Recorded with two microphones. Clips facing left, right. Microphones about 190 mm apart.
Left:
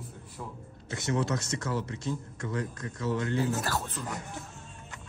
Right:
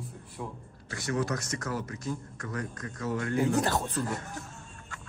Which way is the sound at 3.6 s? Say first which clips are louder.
Right 5 dB; 20° right (ahead or behind).